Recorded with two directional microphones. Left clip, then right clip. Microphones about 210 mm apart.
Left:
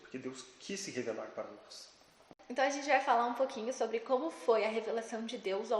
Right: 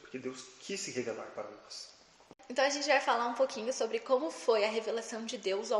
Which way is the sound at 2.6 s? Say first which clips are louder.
Right 2 dB; 40° right (ahead or behind).